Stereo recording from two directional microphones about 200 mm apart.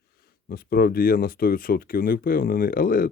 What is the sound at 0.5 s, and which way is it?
Speech, 50° left (ahead or behind).